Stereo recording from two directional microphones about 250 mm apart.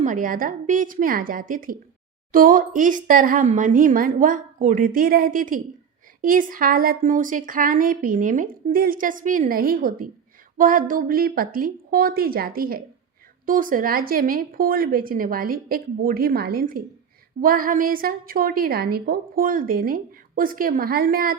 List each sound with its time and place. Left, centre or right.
0.0 s a woman's voice: right